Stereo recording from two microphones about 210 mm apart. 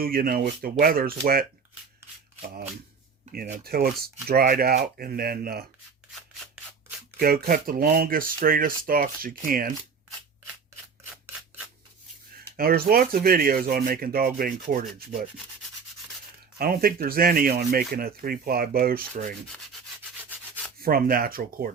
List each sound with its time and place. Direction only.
0.0 s speech: 45° right (ahead or behind)
3.3 s speech: 45° right (ahead or behind)
7.2 s speech: 45° right (ahead or behind)
12.4 s speech: 45° right (ahead or behind)
16.6 s speech: 45° right (ahead or behind)
20.8 s speech: 45° right (ahead or behind)